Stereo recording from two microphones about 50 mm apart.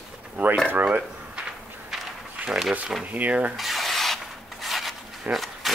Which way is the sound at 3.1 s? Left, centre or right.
Right.